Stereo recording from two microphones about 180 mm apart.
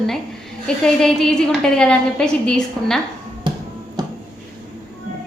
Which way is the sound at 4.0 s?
20° right (ahead or behind).